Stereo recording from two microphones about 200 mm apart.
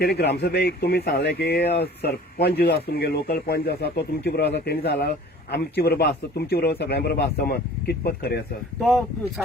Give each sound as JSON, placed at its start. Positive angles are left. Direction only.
{"t": 0.0, "sound": "speech", "side_deg": 50}
{"t": 8.8, "sound": "speech", "side_deg": 0}